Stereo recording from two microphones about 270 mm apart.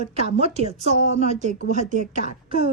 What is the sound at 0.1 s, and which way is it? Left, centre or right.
A woman's voice, right.